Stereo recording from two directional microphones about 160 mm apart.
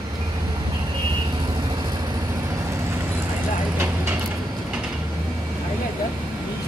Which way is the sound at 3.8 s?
15° right (ahead or behind).